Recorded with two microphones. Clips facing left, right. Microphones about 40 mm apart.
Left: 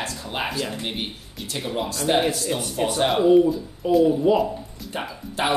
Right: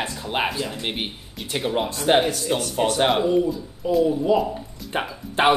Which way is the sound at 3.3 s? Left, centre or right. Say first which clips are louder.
Left 5 dB; centre.